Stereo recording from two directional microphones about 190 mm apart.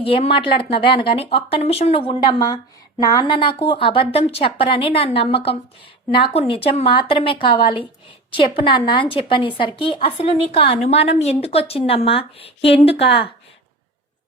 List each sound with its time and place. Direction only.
0.0 s a woman's voice: 30° left (ahead or behind)